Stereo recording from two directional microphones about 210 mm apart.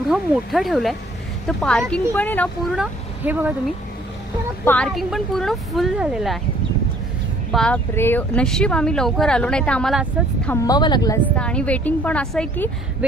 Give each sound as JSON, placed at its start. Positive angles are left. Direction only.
{"t": 0.1, "sound": "speech", "side_deg": 0}
{"t": 2.8, "sound": "speech", "side_deg": -5}
{"t": 4.6, "sound": "speech", "side_deg": 5}
{"t": 7.5, "sound": "speech", "side_deg": 5}
{"t": 10.6, "sound": "a woman's voice", "side_deg": 20}
{"t": 11.3, "sound": "a woman's voice", "side_deg": 5}